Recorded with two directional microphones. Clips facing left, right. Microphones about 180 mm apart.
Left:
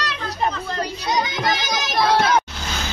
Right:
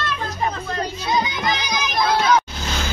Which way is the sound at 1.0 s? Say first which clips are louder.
Even; 45° left (ahead or behind).